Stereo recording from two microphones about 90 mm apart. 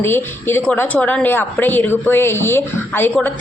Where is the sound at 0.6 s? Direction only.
15° left (ahead or behind).